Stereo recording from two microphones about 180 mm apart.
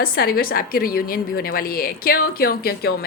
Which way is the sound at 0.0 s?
55° left (ahead or behind).